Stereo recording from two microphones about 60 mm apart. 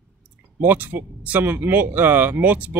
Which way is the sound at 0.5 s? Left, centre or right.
Right.